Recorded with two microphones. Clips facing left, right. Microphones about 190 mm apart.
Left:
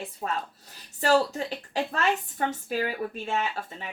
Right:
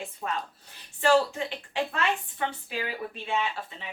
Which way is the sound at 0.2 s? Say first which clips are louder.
Left 2 dB; 35° left (ahead or behind).